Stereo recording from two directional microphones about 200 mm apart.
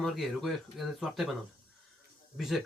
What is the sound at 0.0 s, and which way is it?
Speech, centre (ahead or behind).